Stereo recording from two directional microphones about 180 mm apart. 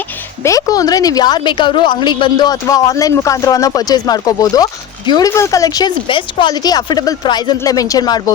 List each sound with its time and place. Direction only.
0.4 s a woman's voice: 20° left (ahead or behind)